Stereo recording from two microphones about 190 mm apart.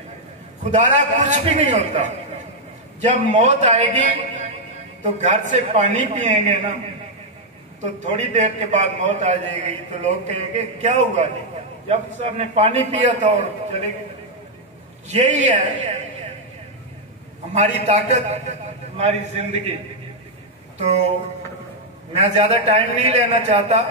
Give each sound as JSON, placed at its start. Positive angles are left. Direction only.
{"t": 0.7, "sound": "a man's voice", "side_deg": -40}
{"t": 7.8, "sound": "a man's voice", "side_deg": -40}
{"t": 15.0, "sound": "a man's voice", "side_deg": -35}
{"t": 17.5, "sound": "a man's voice", "side_deg": -35}
{"t": 22.1, "sound": "a man's voice", "side_deg": -35}